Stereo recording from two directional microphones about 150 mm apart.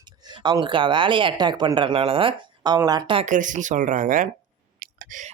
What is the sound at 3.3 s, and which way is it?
Speech, 60° right (ahead or behind).